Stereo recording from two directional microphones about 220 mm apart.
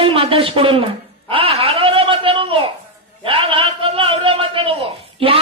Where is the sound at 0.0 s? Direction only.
25° right (ahead or behind).